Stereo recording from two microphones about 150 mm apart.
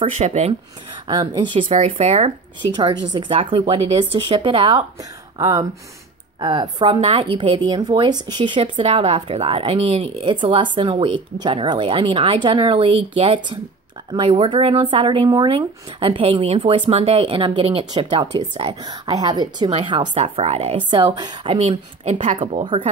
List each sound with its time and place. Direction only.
0.0 s speech: 45° right (ahead or behind)
1.0 s a woman's voice: 30° right (ahead or behind)
2.7 s a woman's voice: 30° right (ahead or behind)
5.4 s a woman's voice: 20° right (ahead or behind)
20.3 s a woman's voice: 45° right (ahead or behind)
21.5 s a woman's voice: 40° right (ahead or behind)